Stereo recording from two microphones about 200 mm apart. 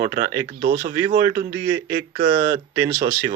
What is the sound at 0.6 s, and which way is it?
Speech, 45° right (ahead or behind).